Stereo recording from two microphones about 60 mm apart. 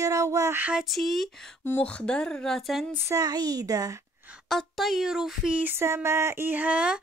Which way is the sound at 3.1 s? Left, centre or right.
Right.